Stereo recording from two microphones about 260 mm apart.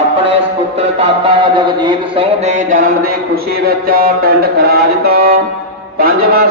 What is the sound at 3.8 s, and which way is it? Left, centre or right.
A man's voice, right.